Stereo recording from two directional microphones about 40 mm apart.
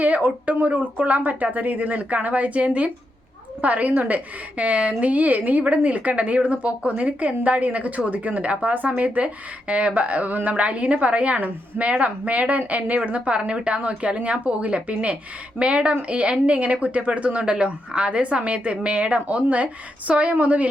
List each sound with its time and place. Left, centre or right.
0.0 s a woman's voice: right